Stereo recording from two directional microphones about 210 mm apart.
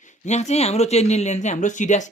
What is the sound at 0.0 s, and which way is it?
Speech, 35° left (ahead or behind).